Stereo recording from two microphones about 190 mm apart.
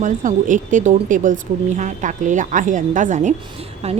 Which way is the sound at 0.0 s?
40° right (ahead or behind).